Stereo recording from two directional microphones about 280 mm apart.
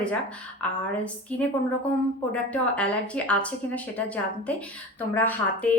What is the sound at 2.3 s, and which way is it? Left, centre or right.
Speech, centre.